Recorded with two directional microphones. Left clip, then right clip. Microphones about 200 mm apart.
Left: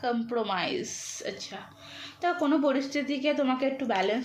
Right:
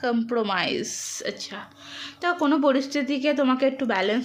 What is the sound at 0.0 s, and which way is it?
A woman's voice, 45° right (ahead or behind).